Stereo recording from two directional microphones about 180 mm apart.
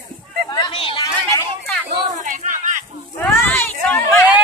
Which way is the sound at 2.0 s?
45° right (ahead or behind).